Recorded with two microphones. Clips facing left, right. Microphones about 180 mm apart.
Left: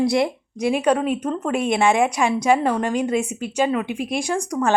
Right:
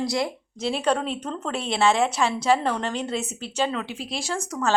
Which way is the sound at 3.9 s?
55° left (ahead or behind).